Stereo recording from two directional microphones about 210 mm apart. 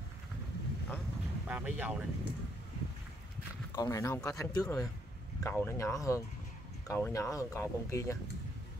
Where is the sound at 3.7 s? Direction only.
15° left (ahead or behind).